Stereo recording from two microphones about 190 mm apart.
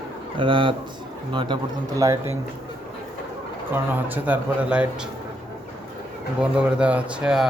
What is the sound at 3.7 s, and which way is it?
A man's voice, 10° right (ahead or behind).